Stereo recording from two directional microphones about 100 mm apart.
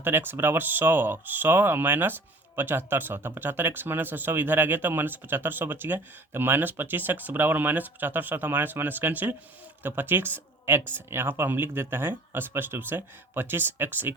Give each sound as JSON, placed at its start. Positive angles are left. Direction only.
{"t": 0.0, "sound": "speech", "side_deg": -20}